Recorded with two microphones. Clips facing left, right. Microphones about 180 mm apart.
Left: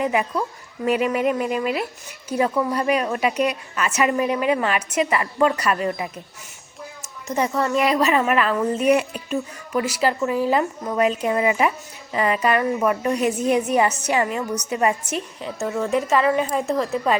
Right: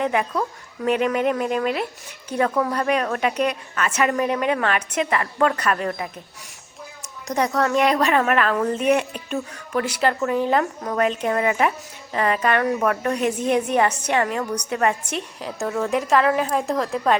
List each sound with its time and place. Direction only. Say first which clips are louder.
0.0 s a woman's voice: even; 5° left (ahead or behind)
7.3 s a woman's voice: right 1 dB; 5° left (ahead or behind)